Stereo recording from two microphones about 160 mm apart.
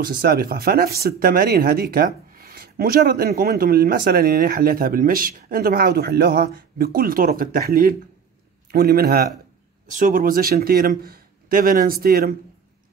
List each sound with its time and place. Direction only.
0.0 s a man's voice: 65° right (ahead or behind)
9.8 s speech: 55° right (ahead or behind)